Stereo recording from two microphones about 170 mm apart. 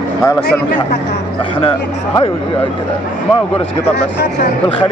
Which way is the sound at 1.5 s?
30° left (ahead or behind).